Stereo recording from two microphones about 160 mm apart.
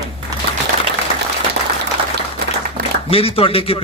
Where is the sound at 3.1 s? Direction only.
35° left (ahead or behind).